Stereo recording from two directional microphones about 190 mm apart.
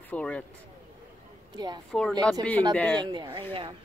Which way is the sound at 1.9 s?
Centre (ahead or behind).